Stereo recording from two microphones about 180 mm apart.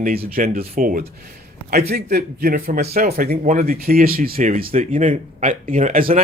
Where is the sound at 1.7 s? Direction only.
60° right (ahead or behind).